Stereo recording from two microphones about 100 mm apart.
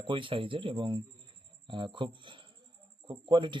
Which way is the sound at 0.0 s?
60° right (ahead or behind).